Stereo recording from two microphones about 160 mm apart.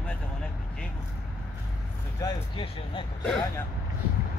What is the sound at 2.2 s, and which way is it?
Speech, 30° left (ahead or behind).